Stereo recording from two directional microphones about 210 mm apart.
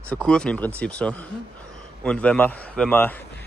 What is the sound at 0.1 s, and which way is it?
A man's voice, 5° left (ahead or behind).